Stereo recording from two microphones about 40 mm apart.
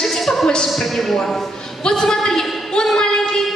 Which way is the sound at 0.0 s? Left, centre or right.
Centre.